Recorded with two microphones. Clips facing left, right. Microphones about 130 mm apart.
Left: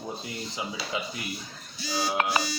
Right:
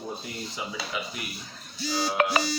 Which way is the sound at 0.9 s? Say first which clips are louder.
Left 2 dB; 25° left (ahead or behind).